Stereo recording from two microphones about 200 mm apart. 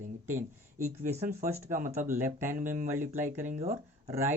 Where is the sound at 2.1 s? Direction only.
10° right (ahead or behind).